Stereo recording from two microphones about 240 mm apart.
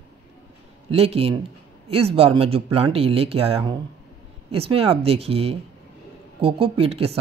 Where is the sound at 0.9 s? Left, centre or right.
Right.